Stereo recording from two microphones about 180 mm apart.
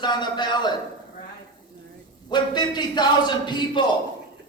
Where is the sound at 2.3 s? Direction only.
25° left (ahead or behind).